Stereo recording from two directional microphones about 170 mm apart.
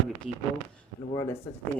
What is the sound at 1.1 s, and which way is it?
Speech, 15° left (ahead or behind).